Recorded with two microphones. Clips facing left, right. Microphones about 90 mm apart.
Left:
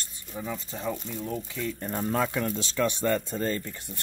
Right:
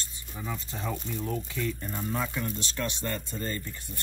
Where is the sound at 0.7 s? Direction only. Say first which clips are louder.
Left 2 dB; 5° left (ahead or behind).